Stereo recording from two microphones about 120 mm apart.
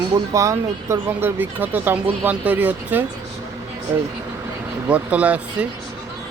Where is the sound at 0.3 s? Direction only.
25° right (ahead or behind).